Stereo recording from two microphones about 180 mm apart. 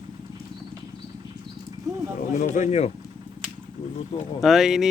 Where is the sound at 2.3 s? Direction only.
45° left (ahead or behind).